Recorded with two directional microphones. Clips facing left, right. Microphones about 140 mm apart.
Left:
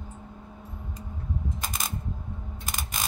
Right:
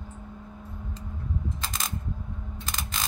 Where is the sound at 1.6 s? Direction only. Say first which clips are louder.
Even; 15° left (ahead or behind).